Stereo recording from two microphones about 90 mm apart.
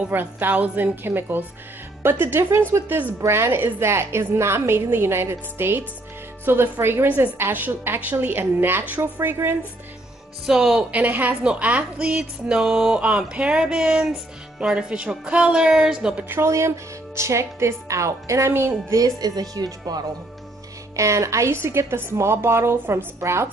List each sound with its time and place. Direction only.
0.1 s a woman's voice: 20° right (ahead or behind)
10.4 s a woman's voice: 5° right (ahead or behind)
11.0 s a woman's voice: 20° right (ahead or behind)
16.3 s speech: 30° right (ahead or behind)
18.9 s speech: 45° right (ahead or behind)
20.9 s a woman's voice: 35° right (ahead or behind)